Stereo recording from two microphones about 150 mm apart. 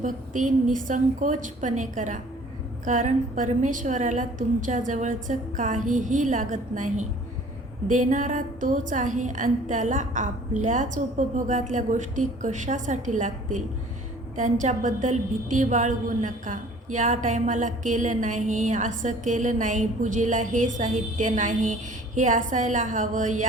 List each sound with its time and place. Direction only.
0.0 s a woman's voice: 60° right (ahead or behind)